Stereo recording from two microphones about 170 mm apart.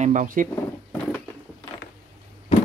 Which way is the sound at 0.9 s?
10° left (ahead or behind).